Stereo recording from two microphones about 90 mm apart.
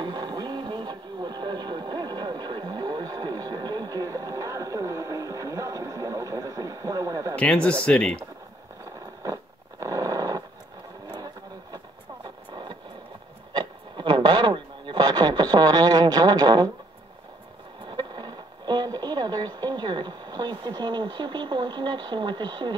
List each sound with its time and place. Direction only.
0.0 s radio: 55° right (ahead or behind); by 7.3 s 40° right (ahead or behind)
7.3 s speech: 10° left (ahead or behind)
9.2 s a sound: 35° right (ahead or behind)
13.5 s radio: 55° right (ahead or behind)
17.8 s radio: 50° right (ahead or behind)